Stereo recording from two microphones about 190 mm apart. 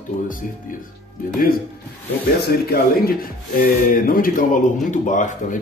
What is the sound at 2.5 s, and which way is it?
Speech, 55° left (ahead or behind).